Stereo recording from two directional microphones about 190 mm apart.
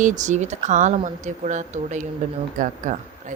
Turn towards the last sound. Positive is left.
turn(degrees=-40)  # may be behind; listen again after turning